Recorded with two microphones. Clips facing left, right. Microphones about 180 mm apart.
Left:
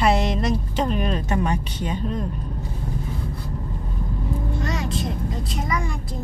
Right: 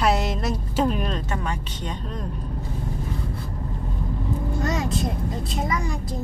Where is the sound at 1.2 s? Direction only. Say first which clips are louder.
Left 5 dB; 15° left (ahead or behind).